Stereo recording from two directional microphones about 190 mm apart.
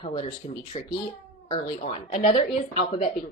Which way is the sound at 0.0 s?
30° left (ahead or behind).